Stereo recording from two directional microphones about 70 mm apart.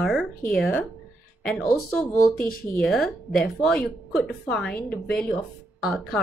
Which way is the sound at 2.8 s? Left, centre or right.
Centre.